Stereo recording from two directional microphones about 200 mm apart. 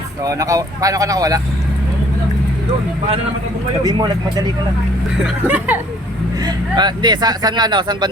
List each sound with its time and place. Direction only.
0.2 s speech: 15° right (ahead or behind)
3.8 s speech: 20° right (ahead or behind)
5.2 s speech: 10° right (ahead or behind)
6.4 s speech: 20° right (ahead or behind)